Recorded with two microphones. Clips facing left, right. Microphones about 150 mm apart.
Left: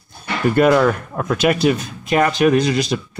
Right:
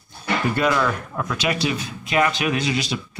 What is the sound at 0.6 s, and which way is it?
Speech, 45° left (ahead or behind).